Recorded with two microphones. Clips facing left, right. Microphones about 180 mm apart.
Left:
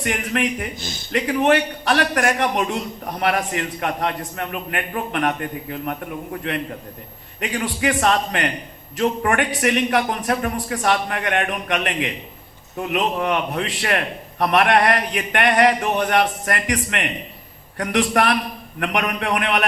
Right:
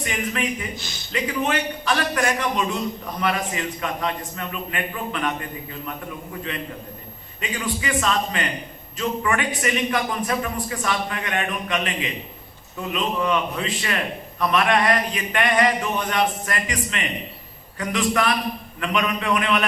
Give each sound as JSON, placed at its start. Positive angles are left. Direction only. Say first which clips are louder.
{"t": 0.0, "sound": "a man's voice", "louder": "left 4 dB", "side_deg": 65}
{"t": 7.3, "sound": "a man's voice", "louder": "left 3 dB", "side_deg": 65}